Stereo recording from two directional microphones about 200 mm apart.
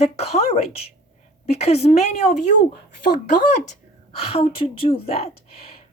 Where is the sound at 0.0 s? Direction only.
30° left (ahead or behind).